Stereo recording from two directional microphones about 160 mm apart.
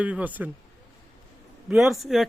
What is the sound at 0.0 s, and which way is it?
Speech, 10° right (ahead or behind).